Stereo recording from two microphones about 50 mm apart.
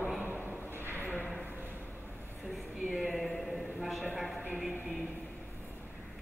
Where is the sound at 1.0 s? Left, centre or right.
Left.